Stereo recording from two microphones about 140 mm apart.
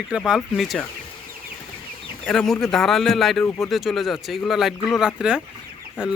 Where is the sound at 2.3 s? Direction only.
5° left (ahead or behind).